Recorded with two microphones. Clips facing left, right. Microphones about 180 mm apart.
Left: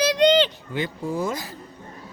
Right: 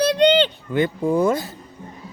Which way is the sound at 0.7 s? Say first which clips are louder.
Right 8 dB; 55° right (ahead or behind).